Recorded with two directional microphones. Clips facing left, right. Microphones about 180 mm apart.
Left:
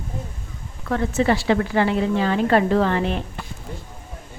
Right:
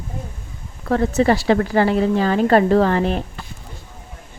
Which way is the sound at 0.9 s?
40° right (ahead or behind).